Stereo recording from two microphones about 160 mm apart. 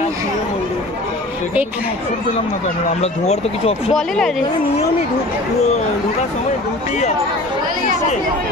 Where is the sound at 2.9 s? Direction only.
45° left (ahead or behind).